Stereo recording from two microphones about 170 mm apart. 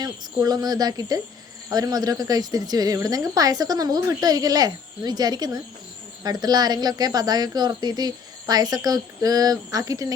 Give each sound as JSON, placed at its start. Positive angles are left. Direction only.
{"t": 0.0, "sound": "a woman's voice", "side_deg": -25}